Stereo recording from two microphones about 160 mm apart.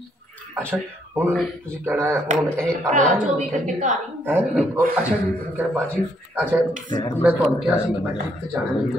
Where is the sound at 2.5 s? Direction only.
5° left (ahead or behind).